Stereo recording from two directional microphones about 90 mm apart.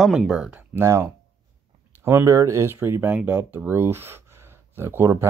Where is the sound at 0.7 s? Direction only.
35° right (ahead or behind).